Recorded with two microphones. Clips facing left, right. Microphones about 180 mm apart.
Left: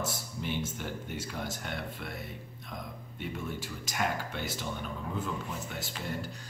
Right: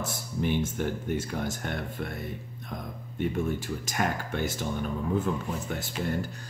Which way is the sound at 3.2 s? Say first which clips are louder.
Right 9 dB; 50° right (ahead or behind).